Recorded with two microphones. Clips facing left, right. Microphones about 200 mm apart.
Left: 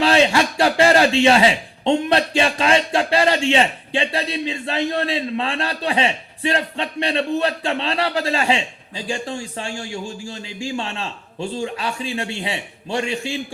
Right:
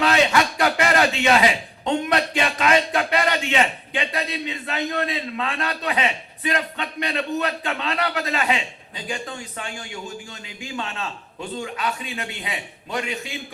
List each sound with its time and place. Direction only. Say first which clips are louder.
0.0 s a man's voice: left 3 dB; 30° left (ahead or behind)